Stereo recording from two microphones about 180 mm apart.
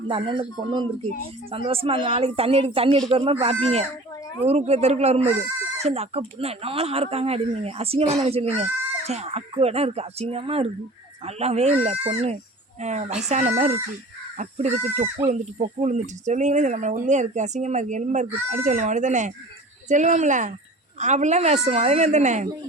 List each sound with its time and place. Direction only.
0.1 s speech: 30° right (ahead or behind)